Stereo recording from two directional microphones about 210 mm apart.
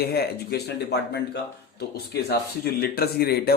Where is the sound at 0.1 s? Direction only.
50° left (ahead or behind).